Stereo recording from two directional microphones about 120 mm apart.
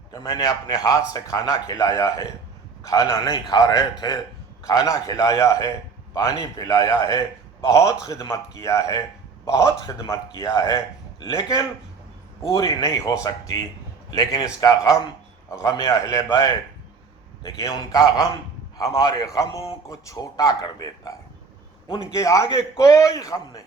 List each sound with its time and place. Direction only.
0.1 s a man's voice: 35° left (ahead or behind)